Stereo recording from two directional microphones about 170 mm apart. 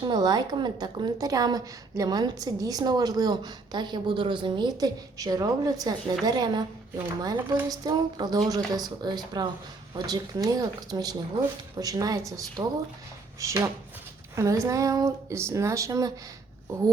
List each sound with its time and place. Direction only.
0.0 s a woman's voice: 25° right (ahead or behind)